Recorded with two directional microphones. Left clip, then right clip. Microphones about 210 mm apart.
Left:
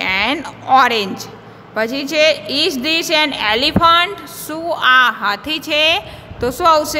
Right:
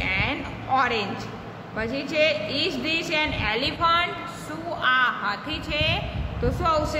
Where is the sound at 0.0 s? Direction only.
55° left (ahead or behind).